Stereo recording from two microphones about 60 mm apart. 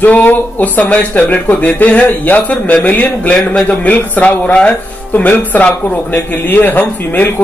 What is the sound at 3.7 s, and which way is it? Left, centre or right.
Speech, left.